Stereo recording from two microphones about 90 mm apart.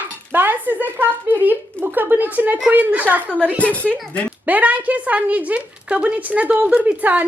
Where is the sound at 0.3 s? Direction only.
20° right (ahead or behind).